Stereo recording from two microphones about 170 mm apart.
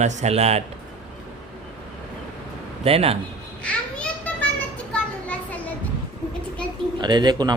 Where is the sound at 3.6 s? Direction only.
10° left (ahead or behind).